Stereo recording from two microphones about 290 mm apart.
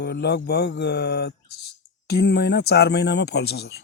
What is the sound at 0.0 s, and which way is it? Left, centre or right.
Speech, left.